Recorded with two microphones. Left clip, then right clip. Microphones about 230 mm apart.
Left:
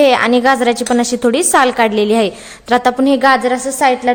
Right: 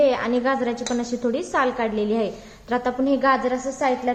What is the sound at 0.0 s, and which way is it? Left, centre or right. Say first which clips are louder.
A woman's voice: left 10 dB; left.